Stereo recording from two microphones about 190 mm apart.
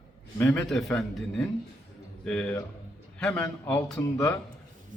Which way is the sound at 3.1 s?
5° left (ahead or behind).